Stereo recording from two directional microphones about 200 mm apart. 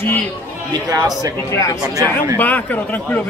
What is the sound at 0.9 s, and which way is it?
Speech, 20° right (ahead or behind).